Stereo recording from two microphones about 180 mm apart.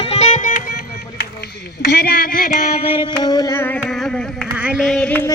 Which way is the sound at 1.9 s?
60° left (ahead or behind).